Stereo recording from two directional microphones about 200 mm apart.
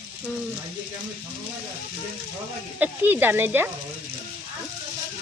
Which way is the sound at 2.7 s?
10° right (ahead or behind).